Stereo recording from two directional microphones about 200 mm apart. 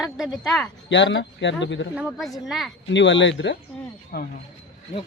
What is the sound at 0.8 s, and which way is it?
Speech, 65° left (ahead or behind).